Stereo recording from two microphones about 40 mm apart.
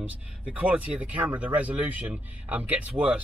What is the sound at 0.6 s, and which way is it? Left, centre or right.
Speech, right.